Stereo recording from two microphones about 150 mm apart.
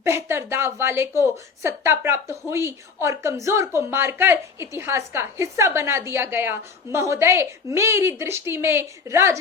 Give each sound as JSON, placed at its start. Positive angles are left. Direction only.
{"t": 0.0, "sound": "a woman's voice", "side_deg": -15}